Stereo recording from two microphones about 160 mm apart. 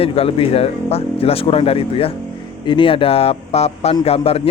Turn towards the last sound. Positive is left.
turn(degrees=40)  # may be behind; listen again after turning